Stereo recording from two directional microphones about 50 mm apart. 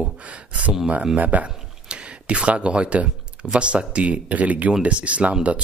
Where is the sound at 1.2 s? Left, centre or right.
Right.